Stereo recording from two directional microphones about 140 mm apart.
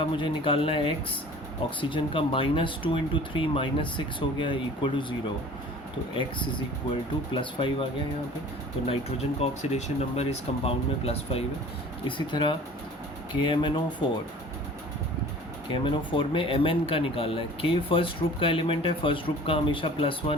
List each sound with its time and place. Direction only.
0.0 s speech: 40° left (ahead or behind)
7.3 s speech: 40° left (ahead or behind)
8.9 s speech: 45° left (ahead or behind)
15.7 s speech: 40° left (ahead or behind)